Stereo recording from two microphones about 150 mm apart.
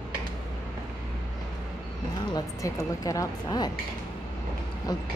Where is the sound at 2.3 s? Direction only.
25° left (ahead or behind).